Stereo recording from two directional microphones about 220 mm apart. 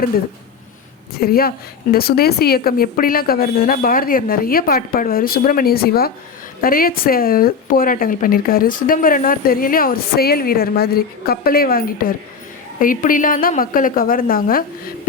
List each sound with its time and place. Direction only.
1.2 s speech: 45° left (ahead or behind)